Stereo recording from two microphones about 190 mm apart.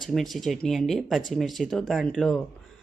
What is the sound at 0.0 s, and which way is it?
Speech, centre (ahead or behind).